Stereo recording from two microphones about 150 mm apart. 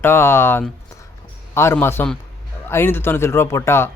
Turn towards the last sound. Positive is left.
turn(degrees=15)  # may be behind; listen again after turning